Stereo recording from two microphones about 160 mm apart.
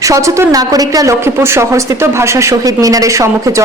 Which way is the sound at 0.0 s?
20° right (ahead or behind).